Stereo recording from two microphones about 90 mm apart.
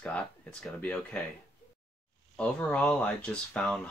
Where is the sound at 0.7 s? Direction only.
20° left (ahead or behind).